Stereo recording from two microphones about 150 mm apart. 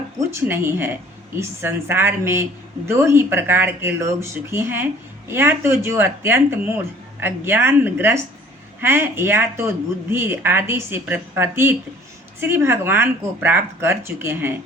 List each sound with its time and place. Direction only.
0.2 s a woman's voice: 20° right (ahead or behind)